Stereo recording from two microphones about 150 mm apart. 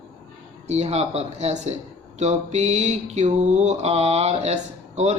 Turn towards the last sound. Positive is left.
turn(degrees=-50)  # may be behind; listen again after turning